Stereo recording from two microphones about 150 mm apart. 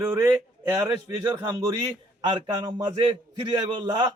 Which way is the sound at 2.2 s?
30° right (ahead or behind).